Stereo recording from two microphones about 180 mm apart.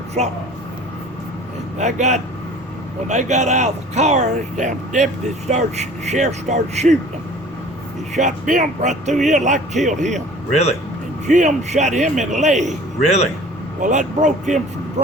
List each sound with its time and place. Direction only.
0.2 s speech: 40° right (ahead or behind)
1.8 s speech: 40° right (ahead or behind)
8.1 s a man's voice: 45° right (ahead or behind)
10.5 s a man's voice: 35° left (ahead or behind)
11.3 s speech: 40° right (ahead or behind)
13.8 s a man's voice: 45° right (ahead or behind)